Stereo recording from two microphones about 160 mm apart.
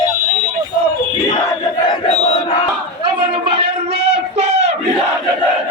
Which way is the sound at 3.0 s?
35° right (ahead or behind).